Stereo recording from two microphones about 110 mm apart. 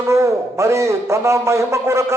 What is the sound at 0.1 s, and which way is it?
A man's voice, 25° right (ahead or behind).